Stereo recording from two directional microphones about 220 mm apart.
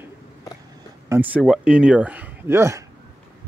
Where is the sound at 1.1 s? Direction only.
5° right (ahead or behind).